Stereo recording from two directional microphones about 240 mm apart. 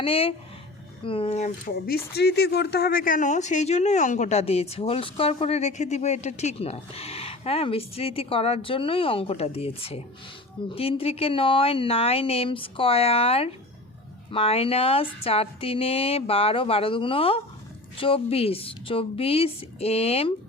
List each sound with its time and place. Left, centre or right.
0.0 s speech: left